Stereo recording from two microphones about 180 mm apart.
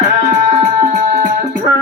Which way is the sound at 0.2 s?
45° right (ahead or behind).